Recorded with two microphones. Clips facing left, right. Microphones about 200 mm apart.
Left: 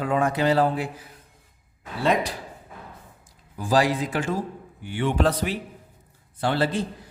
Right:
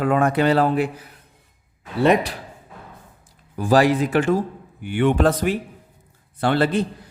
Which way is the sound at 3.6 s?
65° right (ahead or behind).